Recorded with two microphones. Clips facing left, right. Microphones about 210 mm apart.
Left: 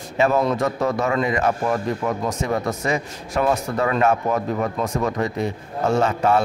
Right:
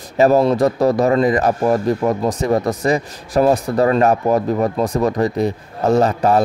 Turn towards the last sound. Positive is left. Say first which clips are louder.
# right 4 dB
turn(degrees=-35)  # may be behind; listen again after turning